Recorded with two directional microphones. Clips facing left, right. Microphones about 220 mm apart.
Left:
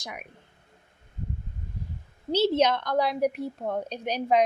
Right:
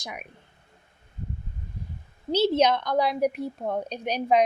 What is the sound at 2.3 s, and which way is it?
A woman's voice, 15° right (ahead or behind).